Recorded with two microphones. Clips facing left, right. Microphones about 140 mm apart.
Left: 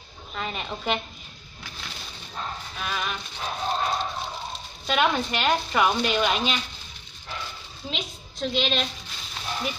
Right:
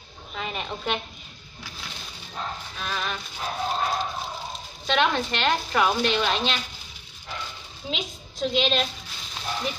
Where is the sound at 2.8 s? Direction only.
5° left (ahead or behind).